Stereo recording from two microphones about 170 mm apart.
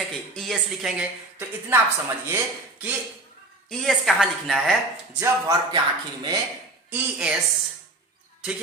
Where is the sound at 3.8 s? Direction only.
Centre (ahead or behind).